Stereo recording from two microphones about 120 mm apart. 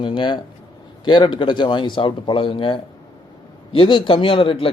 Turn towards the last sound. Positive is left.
turn(degrees=50)  # may be behind; listen again after turning